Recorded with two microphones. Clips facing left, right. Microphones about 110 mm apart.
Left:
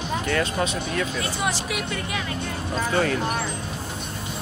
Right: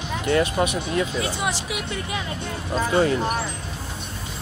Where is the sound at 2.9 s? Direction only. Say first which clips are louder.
Right 3 dB; 20° right (ahead or behind).